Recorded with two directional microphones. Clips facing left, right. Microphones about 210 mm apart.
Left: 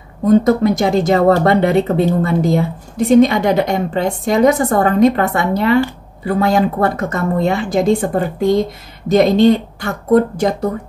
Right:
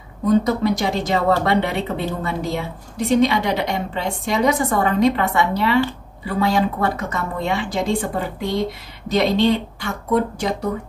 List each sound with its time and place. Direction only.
0.2 s a woman's voice: 50° left (ahead or behind)